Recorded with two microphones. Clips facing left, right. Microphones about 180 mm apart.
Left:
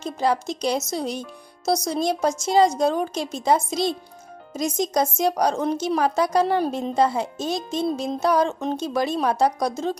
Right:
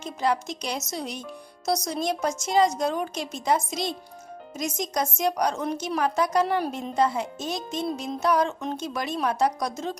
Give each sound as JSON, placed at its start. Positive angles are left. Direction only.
{"t": 0.0, "sound": "speech", "side_deg": 35}